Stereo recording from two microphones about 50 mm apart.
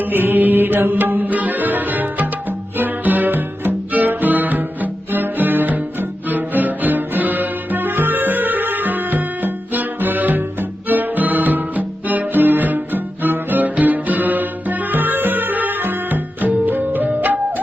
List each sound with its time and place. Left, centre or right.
0.0 s music: right